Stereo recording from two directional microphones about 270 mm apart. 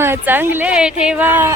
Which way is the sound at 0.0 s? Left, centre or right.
Centre.